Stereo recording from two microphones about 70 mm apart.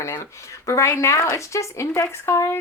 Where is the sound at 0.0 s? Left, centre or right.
Left.